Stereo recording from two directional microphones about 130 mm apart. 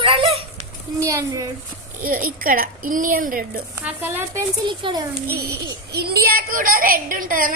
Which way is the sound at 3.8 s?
15° right (ahead or behind).